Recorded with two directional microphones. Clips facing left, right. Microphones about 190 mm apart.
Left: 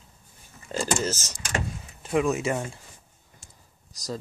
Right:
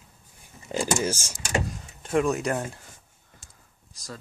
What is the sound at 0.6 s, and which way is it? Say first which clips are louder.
Speech: right 1 dB; 15° right (ahead or behind).